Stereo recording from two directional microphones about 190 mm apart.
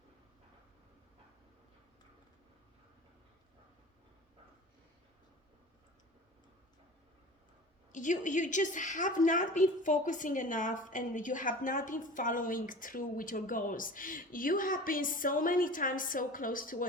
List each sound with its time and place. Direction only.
7.9 s a woman's voice: 40° left (ahead or behind)